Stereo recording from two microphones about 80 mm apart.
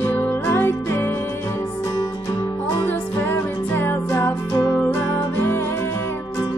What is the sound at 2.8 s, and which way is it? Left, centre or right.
Music, left.